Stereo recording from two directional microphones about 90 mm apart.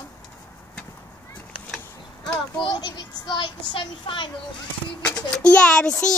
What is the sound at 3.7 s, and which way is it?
Speech, 65° left (ahead or behind).